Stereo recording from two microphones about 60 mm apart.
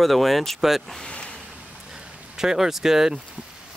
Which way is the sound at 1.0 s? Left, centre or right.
Centre.